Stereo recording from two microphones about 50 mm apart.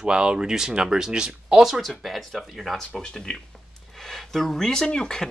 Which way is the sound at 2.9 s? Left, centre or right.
Centre.